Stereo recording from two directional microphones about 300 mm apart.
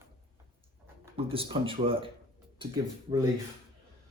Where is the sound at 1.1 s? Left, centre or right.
Centre.